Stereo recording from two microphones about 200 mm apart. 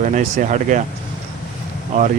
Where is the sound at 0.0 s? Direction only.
40° right (ahead or behind).